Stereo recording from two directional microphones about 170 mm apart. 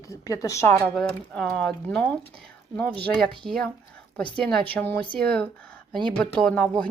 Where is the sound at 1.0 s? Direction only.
5° left (ahead or behind).